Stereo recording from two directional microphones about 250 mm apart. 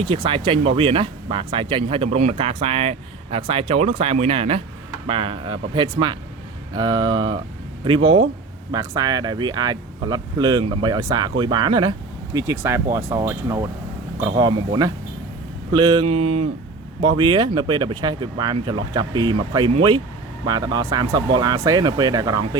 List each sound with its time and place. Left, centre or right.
0.0 s speech: right